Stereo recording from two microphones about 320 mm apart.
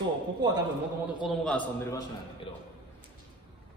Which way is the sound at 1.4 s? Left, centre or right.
Centre.